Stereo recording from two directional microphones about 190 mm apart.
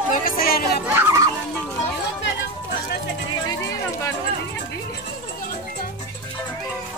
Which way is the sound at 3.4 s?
15° left (ahead or behind).